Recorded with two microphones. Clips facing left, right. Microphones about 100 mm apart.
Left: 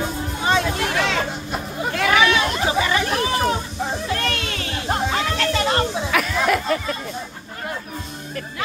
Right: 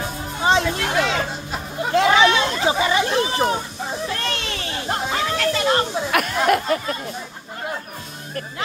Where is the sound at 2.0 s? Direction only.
25° right (ahead or behind).